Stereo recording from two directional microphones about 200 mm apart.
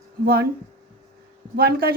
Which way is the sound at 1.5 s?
50° right (ahead or behind).